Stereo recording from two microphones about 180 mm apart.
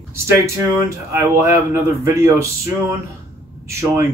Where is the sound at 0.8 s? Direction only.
15° right (ahead or behind).